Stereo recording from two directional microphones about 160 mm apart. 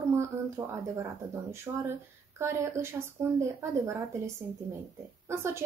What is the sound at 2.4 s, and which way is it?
Speech, 15° right (ahead or behind).